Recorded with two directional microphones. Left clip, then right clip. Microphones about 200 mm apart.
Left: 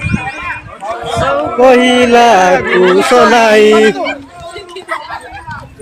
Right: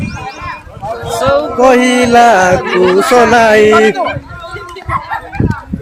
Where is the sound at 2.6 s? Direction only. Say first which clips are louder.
Left 1 dB; 50° left (ahead or behind).